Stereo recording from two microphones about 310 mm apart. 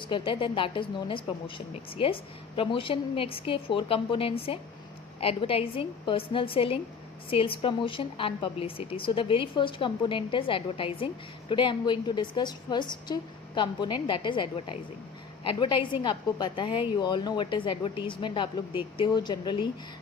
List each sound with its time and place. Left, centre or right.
0.0 s a woman's voice: centre